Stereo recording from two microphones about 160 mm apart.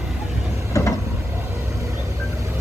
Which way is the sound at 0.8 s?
20° left (ahead or behind).